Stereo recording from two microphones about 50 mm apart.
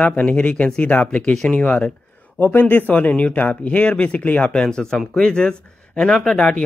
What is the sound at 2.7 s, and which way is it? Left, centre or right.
Speech, left.